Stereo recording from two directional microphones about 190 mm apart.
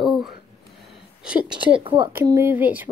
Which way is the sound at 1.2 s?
5° right (ahead or behind).